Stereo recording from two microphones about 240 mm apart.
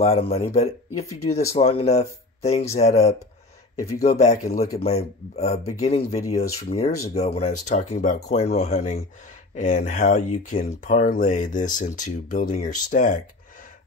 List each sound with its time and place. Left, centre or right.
0.0 s speech: left